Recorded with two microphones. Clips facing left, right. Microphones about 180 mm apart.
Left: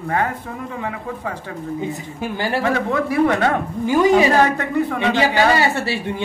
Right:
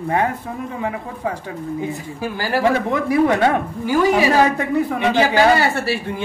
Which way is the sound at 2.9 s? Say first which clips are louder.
Right 1 dB; 15° right (ahead or behind).